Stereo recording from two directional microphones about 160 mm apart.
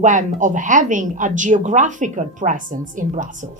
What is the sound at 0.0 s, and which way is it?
Speech, 50° right (ahead or behind).